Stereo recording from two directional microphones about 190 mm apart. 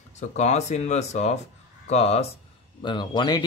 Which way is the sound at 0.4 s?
35° left (ahead or behind).